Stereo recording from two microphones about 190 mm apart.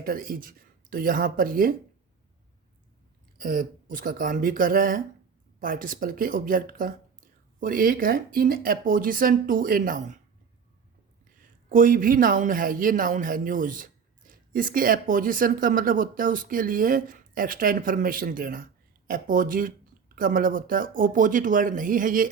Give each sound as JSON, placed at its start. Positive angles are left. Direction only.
{"t": 0.0, "sound": "speech", "side_deg": -50}
{"t": 3.3, "sound": "speech", "side_deg": -45}
{"t": 11.7, "sound": "speech", "side_deg": -45}